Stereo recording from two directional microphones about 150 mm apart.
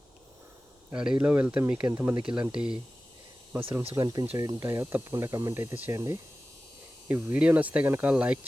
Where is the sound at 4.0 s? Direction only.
20° right (ahead or behind).